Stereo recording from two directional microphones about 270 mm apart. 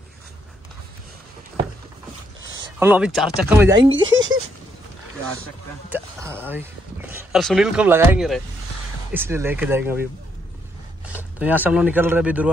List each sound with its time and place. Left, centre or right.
2.8 s speech: centre
3.9 s speech: right
6.3 s a sound: centre
7.4 s speech: centre
11.3 s speech: centre